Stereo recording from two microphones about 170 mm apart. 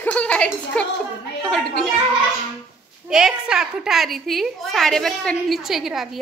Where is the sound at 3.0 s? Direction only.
5° right (ahead or behind).